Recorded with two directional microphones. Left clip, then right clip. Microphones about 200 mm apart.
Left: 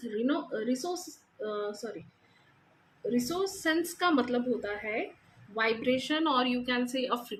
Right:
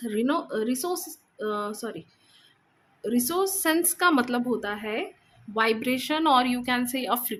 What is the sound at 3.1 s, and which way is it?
A woman's voice, 60° right (ahead or behind).